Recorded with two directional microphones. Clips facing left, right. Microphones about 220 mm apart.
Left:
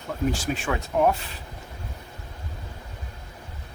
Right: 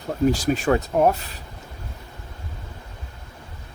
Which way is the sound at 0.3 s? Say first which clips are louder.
Right 7 dB; 40° right (ahead or behind).